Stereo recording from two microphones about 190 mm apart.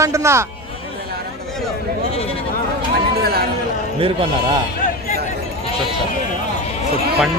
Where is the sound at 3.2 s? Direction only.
55° right (ahead or behind).